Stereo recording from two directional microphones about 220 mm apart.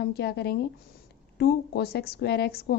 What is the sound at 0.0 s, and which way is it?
A woman's voice, 45° left (ahead or behind).